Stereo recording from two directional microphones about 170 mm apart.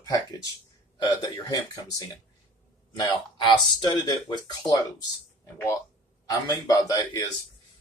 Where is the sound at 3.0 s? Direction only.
25° left (ahead or behind).